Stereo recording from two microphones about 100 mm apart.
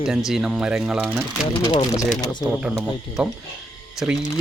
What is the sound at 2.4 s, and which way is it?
Speech, 15° right (ahead or behind).